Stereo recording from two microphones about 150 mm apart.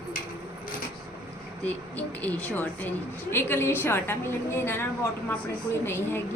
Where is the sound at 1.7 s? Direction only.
10° left (ahead or behind).